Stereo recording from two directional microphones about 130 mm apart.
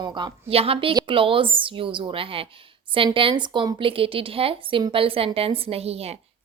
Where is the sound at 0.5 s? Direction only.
50° right (ahead or behind).